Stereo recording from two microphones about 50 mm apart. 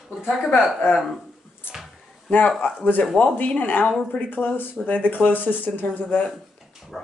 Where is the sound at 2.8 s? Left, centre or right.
Left.